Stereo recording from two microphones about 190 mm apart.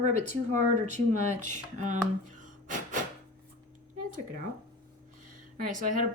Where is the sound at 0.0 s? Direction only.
40° right (ahead or behind).